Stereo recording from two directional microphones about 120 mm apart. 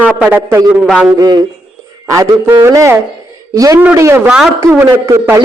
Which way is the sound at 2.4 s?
15° right (ahead or behind).